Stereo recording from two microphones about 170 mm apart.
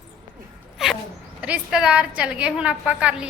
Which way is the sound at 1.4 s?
5° right (ahead or behind).